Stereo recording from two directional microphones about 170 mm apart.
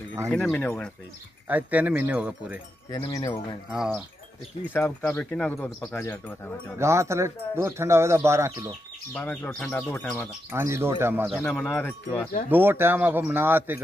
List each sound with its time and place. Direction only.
0.3 s speech: 5° left (ahead or behind)
1.5 s speech: 10° right (ahead or behind)
2.9 s speech: 20° left (ahead or behind)
3.7 s speech: 5° right (ahead or behind)
4.7 s speech: 10° left (ahead or behind)
6.8 s speech: 15° right (ahead or behind)
9.1 s speech: 10° left (ahead or behind)
10.5 s speech: 15° right (ahead or behind)
11.2 s speech: centre (ahead or behind)
12.4 s speech: 10° right (ahead or behind)